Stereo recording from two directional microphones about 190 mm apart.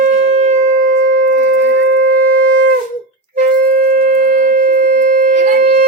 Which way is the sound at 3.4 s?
45° right (ahead or behind).